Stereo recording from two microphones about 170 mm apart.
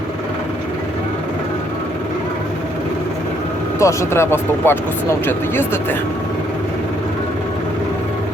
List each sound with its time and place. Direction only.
3.8 s speech: 15° left (ahead or behind)